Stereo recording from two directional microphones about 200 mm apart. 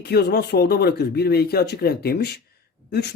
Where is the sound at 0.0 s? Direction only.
55° left (ahead or behind).